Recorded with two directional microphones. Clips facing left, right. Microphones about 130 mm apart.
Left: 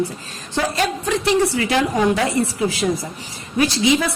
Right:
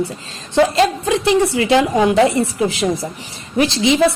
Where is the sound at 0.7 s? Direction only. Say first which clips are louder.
Right 5 dB; 25° right (ahead or behind).